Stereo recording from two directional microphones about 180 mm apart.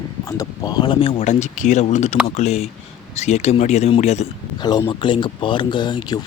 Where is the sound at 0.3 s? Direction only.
20° left (ahead or behind); by 4.3 s 40° left (ahead or behind).